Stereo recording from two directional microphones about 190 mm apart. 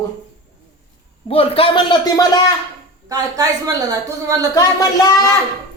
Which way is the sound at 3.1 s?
20° right (ahead or behind).